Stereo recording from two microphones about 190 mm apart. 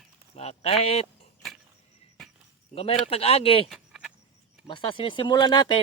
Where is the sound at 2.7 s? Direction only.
30° left (ahead or behind).